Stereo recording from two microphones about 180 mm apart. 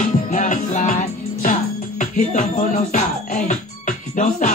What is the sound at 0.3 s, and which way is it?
Music, 45° left (ahead or behind).